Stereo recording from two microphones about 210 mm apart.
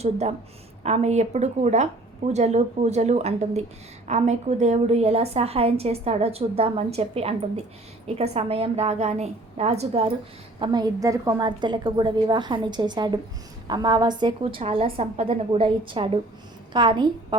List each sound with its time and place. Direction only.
0.0 s a woman's voice: 30° right (ahead or behind)